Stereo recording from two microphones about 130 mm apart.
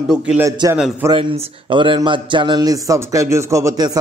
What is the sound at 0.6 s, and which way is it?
Speech, 30° right (ahead or behind).